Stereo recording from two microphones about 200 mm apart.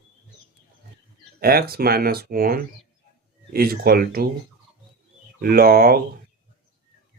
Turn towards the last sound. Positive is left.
turn(degrees=-50)  # may be behind; listen again after turning